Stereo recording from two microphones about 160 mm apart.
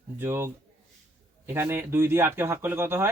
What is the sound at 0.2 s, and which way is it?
Speech, 15° right (ahead or behind).